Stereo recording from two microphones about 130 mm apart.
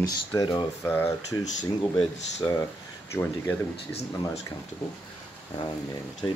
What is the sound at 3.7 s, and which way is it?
Speech, 50° left (ahead or behind).